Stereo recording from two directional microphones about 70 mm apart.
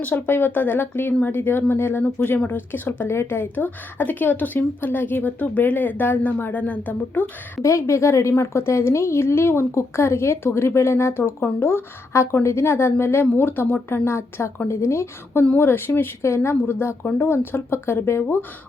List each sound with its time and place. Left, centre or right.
0.0 s speech: left
7.6 s a woman's voice: left